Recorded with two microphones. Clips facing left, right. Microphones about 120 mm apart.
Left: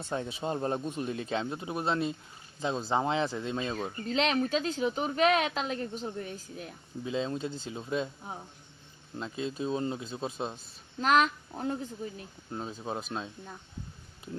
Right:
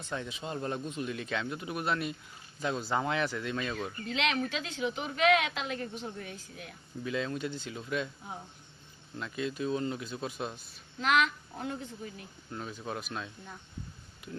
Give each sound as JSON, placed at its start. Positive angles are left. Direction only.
{"t": 0.1, "sound": "speech", "side_deg": 30}
{"t": 7.0, "sound": "speech", "side_deg": 25}
{"t": 11.0, "sound": "speech", "side_deg": 40}